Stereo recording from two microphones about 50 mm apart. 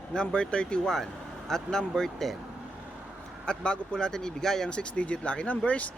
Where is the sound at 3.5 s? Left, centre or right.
Centre.